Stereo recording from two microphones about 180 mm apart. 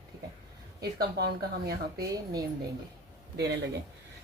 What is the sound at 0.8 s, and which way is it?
Speech, 60° right (ahead or behind).